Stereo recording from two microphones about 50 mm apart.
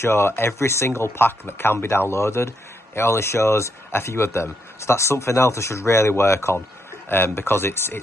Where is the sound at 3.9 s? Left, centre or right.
Left.